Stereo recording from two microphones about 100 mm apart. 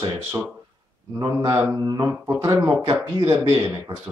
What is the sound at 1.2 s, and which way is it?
Speech, 40° right (ahead or behind).